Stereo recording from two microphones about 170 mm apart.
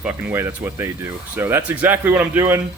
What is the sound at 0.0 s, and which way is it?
Speech, 15° right (ahead or behind).